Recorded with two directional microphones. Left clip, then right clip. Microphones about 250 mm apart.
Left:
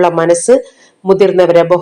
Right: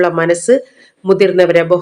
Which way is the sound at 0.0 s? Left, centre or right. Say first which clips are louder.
Left 3 dB; centre.